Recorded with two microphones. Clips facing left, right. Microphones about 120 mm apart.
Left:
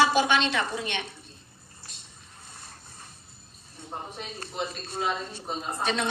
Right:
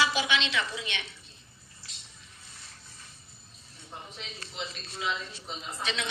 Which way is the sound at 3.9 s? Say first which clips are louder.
Left 6 dB; 50° left (ahead or behind).